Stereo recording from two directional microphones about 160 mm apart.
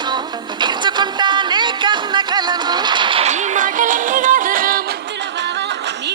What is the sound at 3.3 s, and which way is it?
Music, 50° right (ahead or behind).